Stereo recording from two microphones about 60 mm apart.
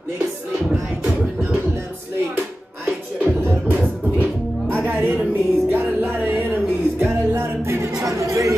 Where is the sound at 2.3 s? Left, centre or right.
Right.